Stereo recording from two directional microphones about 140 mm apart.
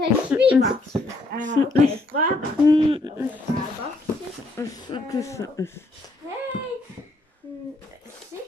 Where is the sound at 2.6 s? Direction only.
35° right (ahead or behind).